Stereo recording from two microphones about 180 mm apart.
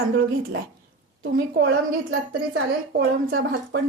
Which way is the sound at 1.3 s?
70° right (ahead or behind).